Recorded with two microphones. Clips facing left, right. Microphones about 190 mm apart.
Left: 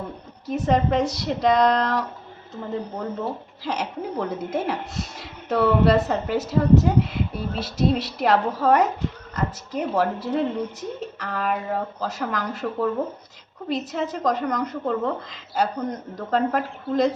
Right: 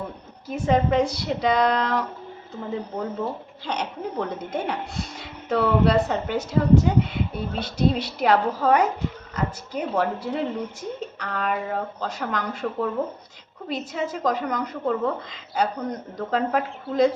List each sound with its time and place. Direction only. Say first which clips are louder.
0.4 s speech: even; centre (ahead or behind)
3.6 s speech: left 1 dB; 5° left (ahead or behind)